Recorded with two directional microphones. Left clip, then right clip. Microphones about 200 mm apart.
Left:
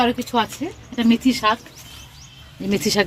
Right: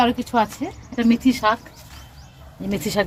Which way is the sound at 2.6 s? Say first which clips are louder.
Left 3 dB; 20° left (ahead or behind).